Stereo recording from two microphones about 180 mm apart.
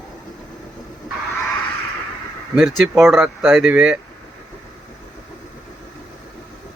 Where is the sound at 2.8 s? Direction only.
15° right (ahead or behind).